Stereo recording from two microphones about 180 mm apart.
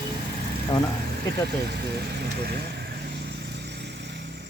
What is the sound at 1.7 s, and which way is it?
Vehicle, 65° right (ahead or behind).